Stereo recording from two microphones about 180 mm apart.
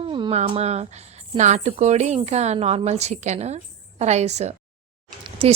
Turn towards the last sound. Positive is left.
turn(degrees=-30)  # may be behind; listen again after turning